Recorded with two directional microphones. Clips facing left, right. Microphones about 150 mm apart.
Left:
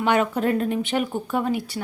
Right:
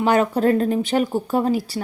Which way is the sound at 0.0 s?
35° right (ahead or behind).